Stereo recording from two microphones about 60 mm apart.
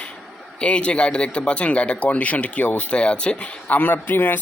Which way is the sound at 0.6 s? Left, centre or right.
Centre.